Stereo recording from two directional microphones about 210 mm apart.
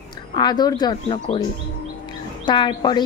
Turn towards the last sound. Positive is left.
turn(degrees=20)  # may be behind; listen again after turning